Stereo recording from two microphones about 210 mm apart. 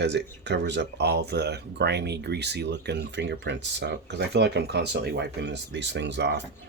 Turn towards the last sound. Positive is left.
turn(degrees=-55)  # may be behind; listen again after turning